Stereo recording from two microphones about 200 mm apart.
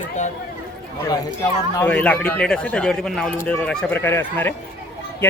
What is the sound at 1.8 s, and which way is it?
Speech, 5° left (ahead or behind).